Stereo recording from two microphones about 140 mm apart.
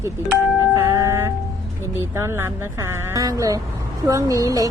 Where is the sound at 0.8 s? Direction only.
20° right (ahead or behind).